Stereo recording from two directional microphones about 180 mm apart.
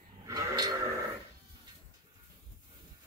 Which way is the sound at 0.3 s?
20° right (ahead or behind).